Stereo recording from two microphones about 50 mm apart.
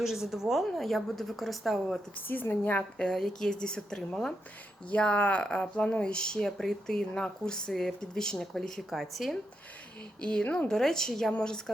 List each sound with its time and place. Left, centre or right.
0.0 s a woman's voice: centre
2.2 s a woman's voice: left
3.0 s speech: centre
10.2 s a woman's voice: left
10.4 s a woman's voice: left
10.7 s speech: centre